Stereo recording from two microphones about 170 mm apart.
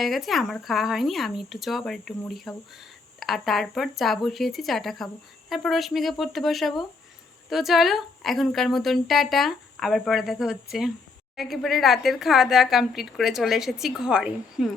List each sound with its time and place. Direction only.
0.0 s speech: centre (ahead or behind)